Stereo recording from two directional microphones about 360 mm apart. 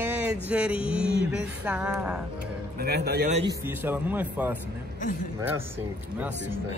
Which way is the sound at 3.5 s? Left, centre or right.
Centre.